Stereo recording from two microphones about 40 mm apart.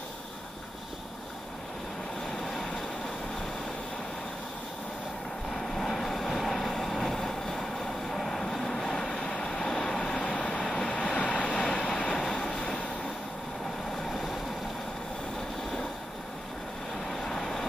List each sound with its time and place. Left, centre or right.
5.5 s vehicle: centre; by 10.6 s left
10.6 s vehicle: centre
11.1 s vehicle: left
17.1 s vehicle: centre